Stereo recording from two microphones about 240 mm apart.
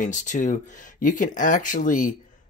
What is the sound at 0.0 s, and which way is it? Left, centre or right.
Speech, left.